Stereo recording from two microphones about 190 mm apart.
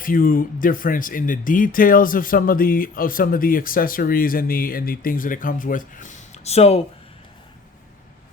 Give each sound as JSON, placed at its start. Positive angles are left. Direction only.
{"t": 0.0, "sound": "speech", "side_deg": 45}